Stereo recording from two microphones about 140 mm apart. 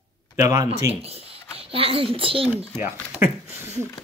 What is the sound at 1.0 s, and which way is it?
Speech, 45° right (ahead or behind).